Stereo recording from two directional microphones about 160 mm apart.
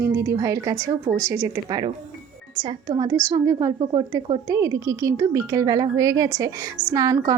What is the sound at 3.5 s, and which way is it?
Speech, 30° right (ahead or behind).